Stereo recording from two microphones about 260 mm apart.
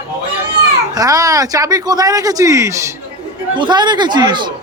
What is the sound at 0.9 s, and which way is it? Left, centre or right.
Speech, centre.